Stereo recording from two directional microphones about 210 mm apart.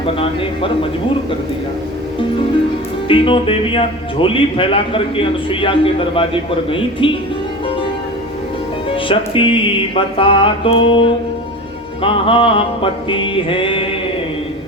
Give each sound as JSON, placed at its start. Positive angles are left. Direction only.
{"t": 0.0, "sound": "speech", "side_deg": 25}
{"t": 3.1, "sound": "speech", "side_deg": 25}
{"t": 8.9, "sound": "speech", "side_deg": 25}